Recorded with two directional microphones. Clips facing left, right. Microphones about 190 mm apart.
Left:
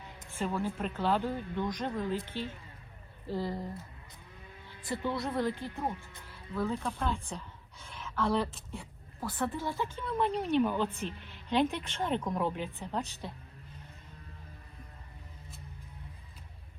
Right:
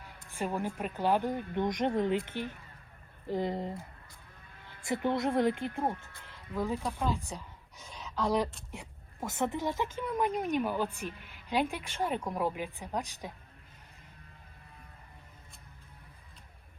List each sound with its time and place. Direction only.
0.3 s speech: 15° right (ahead or behind)
5.0 s speech: 25° right (ahead or behind)
5.5 s speech: 55° right (ahead or behind)
6.6 s a woman's voice: 15° right (ahead or behind)